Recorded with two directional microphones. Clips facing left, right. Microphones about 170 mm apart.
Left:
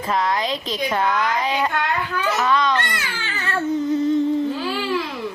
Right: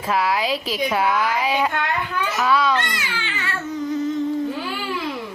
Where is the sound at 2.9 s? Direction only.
45° left (ahead or behind).